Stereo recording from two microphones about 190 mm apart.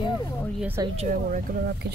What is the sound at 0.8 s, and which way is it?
Speech, 35° right (ahead or behind).